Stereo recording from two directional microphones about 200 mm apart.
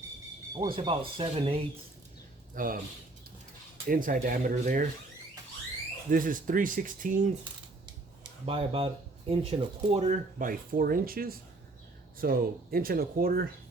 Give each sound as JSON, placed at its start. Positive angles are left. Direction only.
{"t": 0.6, "sound": "speech", "side_deg": -25}
{"t": 2.6, "sound": "speech", "side_deg": -45}
{"t": 3.8, "sound": "speech", "side_deg": -40}
{"t": 6.1, "sound": "speech", "side_deg": -45}
{"t": 8.4, "sound": "speech", "side_deg": -30}